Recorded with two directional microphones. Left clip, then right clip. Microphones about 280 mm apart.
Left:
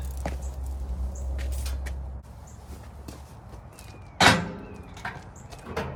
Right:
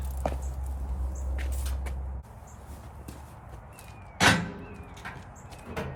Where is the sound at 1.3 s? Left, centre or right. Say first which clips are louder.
Left 1 dB; centre.